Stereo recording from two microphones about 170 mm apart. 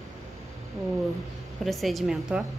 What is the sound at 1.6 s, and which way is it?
Speech, centre (ahead or behind).